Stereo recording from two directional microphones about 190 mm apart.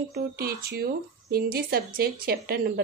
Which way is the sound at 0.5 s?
55° right (ahead or behind).